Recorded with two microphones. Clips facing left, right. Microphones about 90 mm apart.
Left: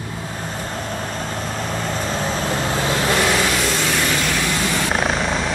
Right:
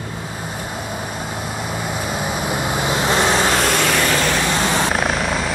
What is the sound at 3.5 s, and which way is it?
Vehicle, 60° right (ahead or behind).